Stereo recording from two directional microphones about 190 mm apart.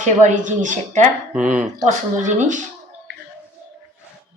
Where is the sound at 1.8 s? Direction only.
40° right (ahead or behind).